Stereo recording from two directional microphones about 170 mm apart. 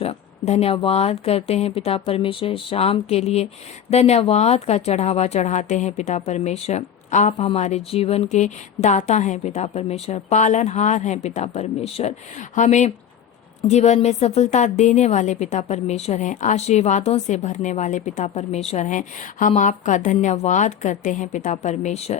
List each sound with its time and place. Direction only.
0.0 s a woman's voice: 40° left (ahead or behind)